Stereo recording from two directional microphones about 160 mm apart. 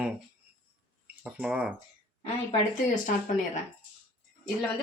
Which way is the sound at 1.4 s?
5° right (ahead or behind).